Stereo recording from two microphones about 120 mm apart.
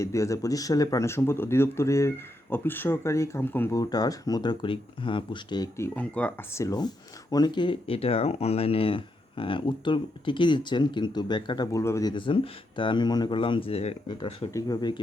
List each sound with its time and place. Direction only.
0.0 s speech: 25° left (ahead or behind)
3.8 s speech: 35° left (ahead or behind)
6.0 s speech: 10° left (ahead or behind)
6.5 s speech: 25° left (ahead or behind)
6.7 s speech: 35° left (ahead or behind)
11.8 s speech: 25° left (ahead or behind)
12.1 s speech: 45° left (ahead or behind)
14.5 s speech: 35° left (ahead or behind)